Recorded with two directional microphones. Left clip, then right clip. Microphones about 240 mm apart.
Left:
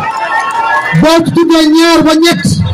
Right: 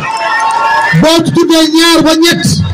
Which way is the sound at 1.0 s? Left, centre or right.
Right.